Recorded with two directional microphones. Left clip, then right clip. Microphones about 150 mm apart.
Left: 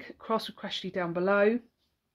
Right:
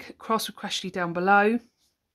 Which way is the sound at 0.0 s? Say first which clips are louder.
Right 4 dB; 45° right (ahead or behind).